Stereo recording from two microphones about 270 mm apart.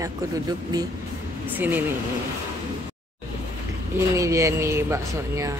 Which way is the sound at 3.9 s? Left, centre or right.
Centre.